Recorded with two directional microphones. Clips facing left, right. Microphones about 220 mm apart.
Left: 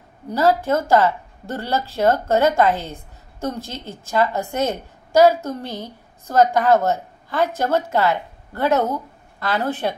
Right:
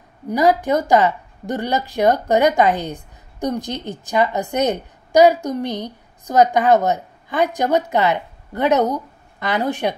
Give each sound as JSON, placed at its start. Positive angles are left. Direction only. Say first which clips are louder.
{"t": 0.3, "sound": "a woman's voice", "louder": "right 2 dB", "side_deg": -15}